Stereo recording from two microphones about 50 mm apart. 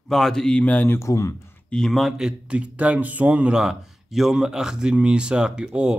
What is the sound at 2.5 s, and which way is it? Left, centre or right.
Speech, right.